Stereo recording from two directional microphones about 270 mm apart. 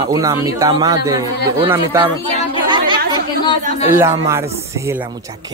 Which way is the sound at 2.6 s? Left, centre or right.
Centre.